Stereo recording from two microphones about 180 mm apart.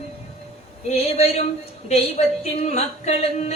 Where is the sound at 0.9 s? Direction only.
35° left (ahead or behind).